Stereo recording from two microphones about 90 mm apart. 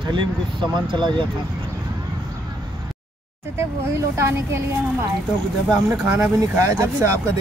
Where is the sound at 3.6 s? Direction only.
30° right (ahead or behind).